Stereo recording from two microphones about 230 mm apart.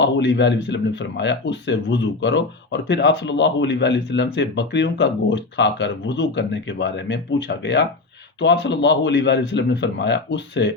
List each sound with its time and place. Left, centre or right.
0.0 s speech: left